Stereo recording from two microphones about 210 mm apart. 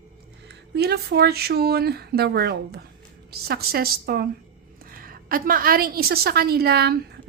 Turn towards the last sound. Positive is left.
turn(degrees=-50)  # may be behind; listen again after turning